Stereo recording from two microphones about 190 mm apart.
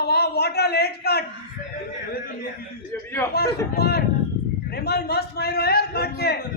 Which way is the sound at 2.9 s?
10° left (ahead or behind).